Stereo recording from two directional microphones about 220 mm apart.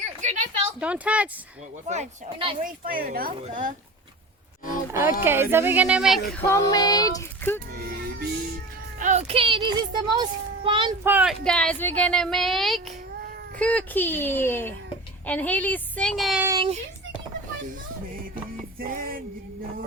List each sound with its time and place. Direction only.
0.2 s a sound: 30° right (ahead or behind)
0.8 s speech: 5° right (ahead or behind)
1.9 s a child's voice: 25° right (ahead or behind)
2.6 s a woman's voice: 40° right (ahead or behind)
4.9 s speech: 10° right (ahead or behind)
6.5 s speech: 15° left (ahead or behind)
7.7 s speech: 45° right (ahead or behind)
9.0 s a child's voice: 30° right (ahead or behind)
11.0 s speech: 5° right (ahead or behind)
16.5 s a child's voice: 20° right (ahead or behind)
18.8 s a woman's voice: 40° right (ahead or behind)